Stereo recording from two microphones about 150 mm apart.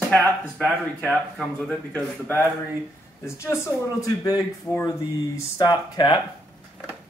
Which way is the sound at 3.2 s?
20° left (ahead or behind).